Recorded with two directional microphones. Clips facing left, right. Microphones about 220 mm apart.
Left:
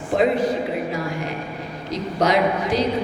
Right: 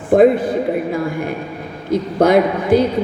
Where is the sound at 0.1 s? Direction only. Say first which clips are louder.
Right 7 dB; 55° right (ahead or behind).